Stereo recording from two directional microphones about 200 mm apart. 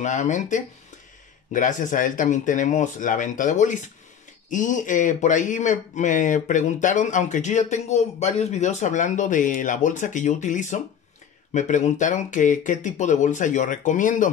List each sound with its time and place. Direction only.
0.0 s speech: 40° left (ahead or behind)